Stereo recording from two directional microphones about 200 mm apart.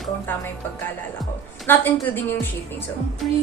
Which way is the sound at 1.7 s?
10° left (ahead or behind).